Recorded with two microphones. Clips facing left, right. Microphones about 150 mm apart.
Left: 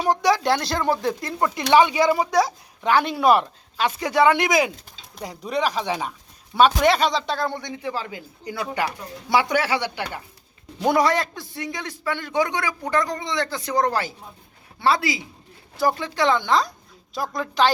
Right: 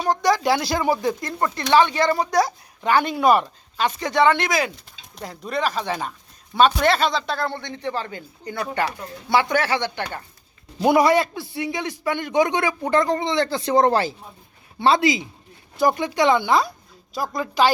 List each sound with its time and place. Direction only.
0.0 s speech: 5° left (ahead or behind)
10.8 s a man's voice: 10° right (ahead or behind)